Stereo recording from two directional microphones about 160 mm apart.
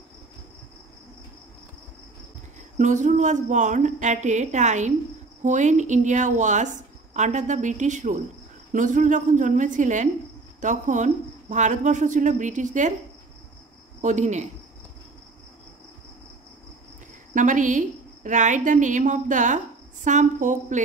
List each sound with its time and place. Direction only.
2.8 s a woman's voice: 50° right (ahead or behind)
14.0 s a woman's voice: 50° right (ahead or behind)
17.3 s a woman's voice: 55° right (ahead or behind)